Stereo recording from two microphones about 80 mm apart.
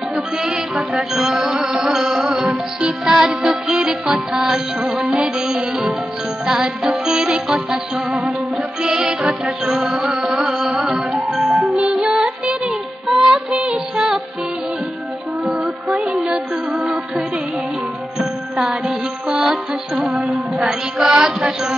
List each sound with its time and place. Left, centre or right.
0.1 s music: centre
15.4 s music: centre
18.6 s music: centre